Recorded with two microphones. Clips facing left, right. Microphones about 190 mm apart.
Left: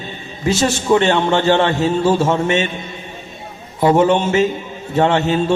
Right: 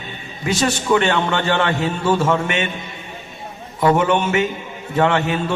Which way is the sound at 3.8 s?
25° left (ahead or behind).